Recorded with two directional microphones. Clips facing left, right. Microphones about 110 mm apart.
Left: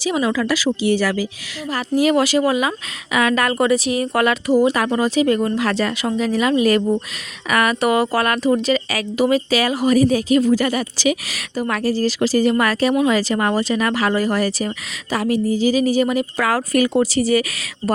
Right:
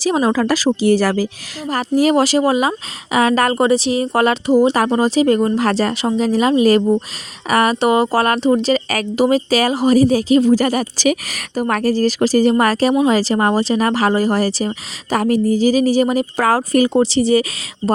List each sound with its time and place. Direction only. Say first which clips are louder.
0.0 s speech: right 4 dB; 40° right (ahead or behind)
8.9 s speech: right 2 dB; 45° right (ahead or behind)
15.1 s speech: right 4 dB; 45° right (ahead or behind); by 17.4 s 25° right (ahead or behind)